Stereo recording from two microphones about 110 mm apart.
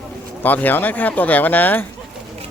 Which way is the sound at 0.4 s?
15° left (ahead or behind).